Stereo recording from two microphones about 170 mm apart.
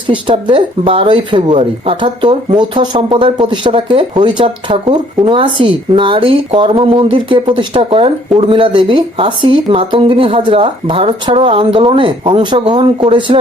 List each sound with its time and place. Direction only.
0.1 s speech: 30° right (ahead or behind)